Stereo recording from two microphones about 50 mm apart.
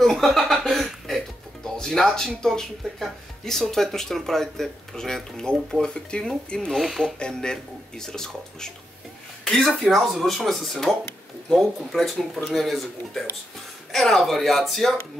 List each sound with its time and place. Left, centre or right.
0.0 s a sound: centre
0.5 s music: centre
2.8 s speech: centre
6.7 s speech: centre
7.2 s speech: centre
9.4 s a sound: centre
9.7 s speech: centre